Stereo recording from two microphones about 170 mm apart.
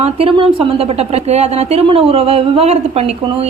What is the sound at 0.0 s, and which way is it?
A woman's voice, 35° right (ahead or behind).